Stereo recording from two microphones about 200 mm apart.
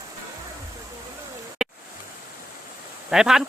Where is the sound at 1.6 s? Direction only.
5° right (ahead or behind).